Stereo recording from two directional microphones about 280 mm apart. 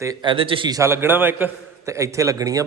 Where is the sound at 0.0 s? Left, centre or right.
Centre.